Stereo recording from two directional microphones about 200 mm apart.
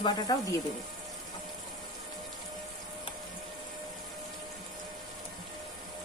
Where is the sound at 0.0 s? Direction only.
20° left (ahead or behind).